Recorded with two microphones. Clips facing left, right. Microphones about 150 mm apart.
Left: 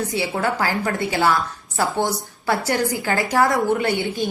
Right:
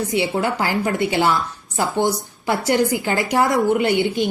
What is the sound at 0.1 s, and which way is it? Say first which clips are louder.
A woman's voice: right 2 dB; 20° right (ahead or behind).